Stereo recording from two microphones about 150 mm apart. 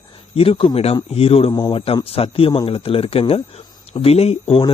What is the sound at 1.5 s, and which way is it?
Speech, 25° left (ahead or behind).